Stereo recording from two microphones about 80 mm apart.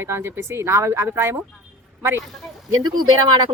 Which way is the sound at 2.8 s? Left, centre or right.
Right.